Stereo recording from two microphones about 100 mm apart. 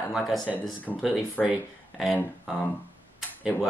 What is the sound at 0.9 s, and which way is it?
Speech, 15° left (ahead or behind).